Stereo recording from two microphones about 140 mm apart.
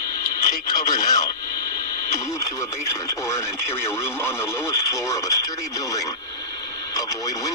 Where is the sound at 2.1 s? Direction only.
20° left (ahead or behind).